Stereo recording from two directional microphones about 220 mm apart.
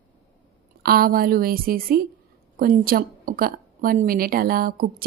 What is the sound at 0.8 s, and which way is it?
A woman's voice, 45° right (ahead or behind).